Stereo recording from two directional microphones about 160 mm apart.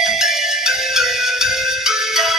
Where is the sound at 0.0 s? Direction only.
Centre (ahead or behind).